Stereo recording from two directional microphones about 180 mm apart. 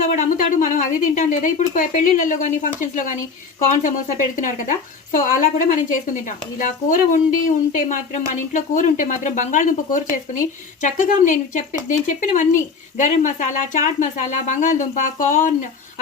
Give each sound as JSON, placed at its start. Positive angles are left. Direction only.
{"t": 0.2, "sound": "a woman's voice", "side_deg": 45}
{"t": 5.1, "sound": "a woman's voice", "side_deg": 45}